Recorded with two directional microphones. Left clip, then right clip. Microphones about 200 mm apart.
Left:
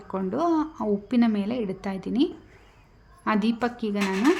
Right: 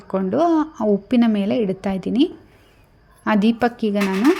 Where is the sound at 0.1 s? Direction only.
20° right (ahead or behind).